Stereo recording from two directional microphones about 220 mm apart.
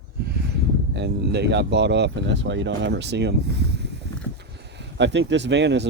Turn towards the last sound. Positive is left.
turn(degrees=-55)  # may be behind; listen again after turning